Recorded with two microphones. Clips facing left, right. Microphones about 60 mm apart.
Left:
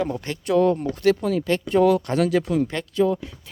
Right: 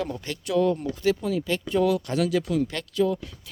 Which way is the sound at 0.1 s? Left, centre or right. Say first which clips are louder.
Left 5 dB; left.